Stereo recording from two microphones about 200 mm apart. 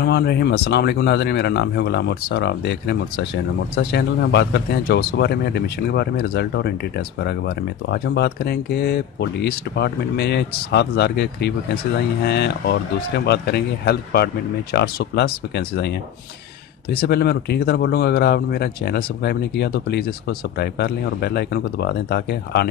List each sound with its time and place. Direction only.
0.0 s speech: 55° left (ahead or behind)
16.9 s speech: 50° left (ahead or behind)